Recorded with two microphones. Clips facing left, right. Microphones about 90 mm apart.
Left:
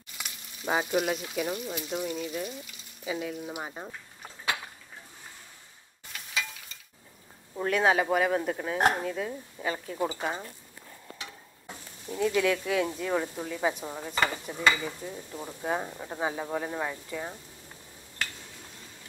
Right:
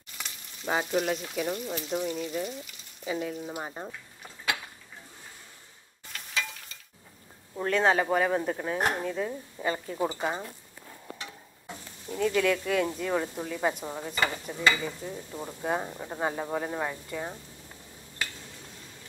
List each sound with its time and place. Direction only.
0.2 s frying: 10° left (ahead or behind)
2.1 s speech: centre (ahead or behind)
6.1 s stir: 5° left (ahead or behind)
7.5 s speech: 5° left (ahead or behind)
12.1 s speech: 5° left (ahead or behind)